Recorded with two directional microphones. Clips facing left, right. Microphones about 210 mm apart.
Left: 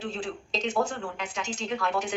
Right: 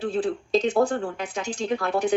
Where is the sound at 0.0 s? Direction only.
55° right (ahead or behind).